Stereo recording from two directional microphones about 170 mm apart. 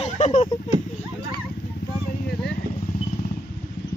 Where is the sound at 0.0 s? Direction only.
40° left (ahead or behind).